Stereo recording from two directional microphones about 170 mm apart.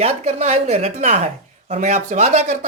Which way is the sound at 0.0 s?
40° right (ahead or behind).